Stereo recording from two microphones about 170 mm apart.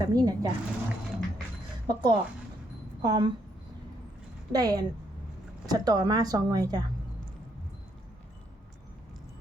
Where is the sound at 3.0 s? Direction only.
25° right (ahead or behind).